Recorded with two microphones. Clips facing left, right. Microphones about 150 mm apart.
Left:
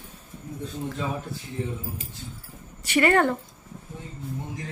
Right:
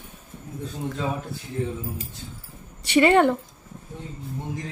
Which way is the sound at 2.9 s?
20° right (ahead or behind).